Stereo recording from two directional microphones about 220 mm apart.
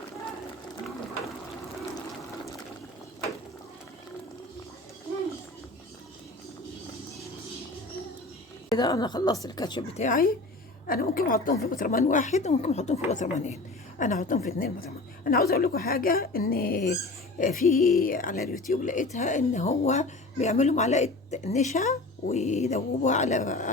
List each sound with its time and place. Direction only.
8.7 s a woman's voice: 20° left (ahead or behind)
10.0 s speech: 35° left (ahead or behind)